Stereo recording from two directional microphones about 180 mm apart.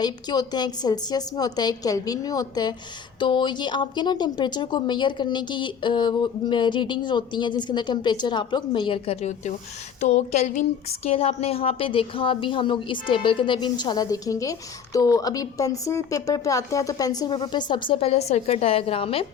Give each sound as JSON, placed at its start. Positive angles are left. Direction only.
{"t": 0.0, "sound": "a woman's voice", "side_deg": 25}